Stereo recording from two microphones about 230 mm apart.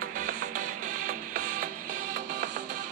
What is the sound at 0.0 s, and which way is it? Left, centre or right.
Music, right.